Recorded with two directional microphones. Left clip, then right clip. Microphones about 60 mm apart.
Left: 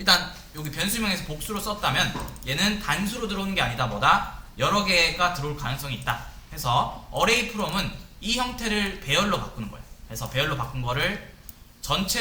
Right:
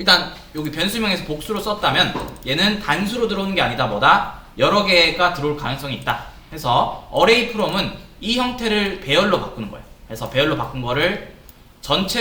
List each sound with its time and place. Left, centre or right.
0.0 s speech: left